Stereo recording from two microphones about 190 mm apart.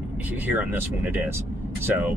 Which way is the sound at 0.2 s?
10° right (ahead or behind).